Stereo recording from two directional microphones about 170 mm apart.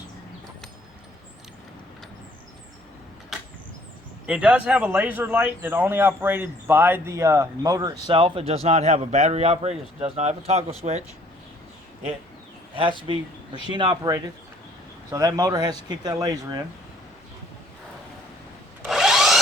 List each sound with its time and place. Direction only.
3.3 s vehicle: centre (ahead or behind)
4.3 s speech: 5° right (ahead or behind); by 11.0 s 40° right (ahead or behind)
12.7 s speech: 30° right (ahead or behind)
18.9 s wood: centre (ahead or behind)